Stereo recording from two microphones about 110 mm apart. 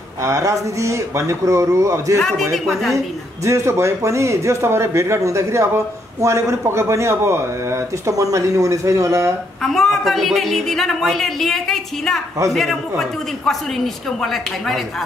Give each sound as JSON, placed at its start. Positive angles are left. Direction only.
{"t": 0.2, "sound": "speech", "side_deg": -30}
{"t": 2.5, "sound": "a woman's voice", "side_deg": 0}
{"t": 3.4, "sound": "speech", "side_deg": -25}
{"t": 9.6, "sound": "a woman's voice", "side_deg": 0}
{"t": 14.2, "sound": "a woman's voice", "side_deg": 0}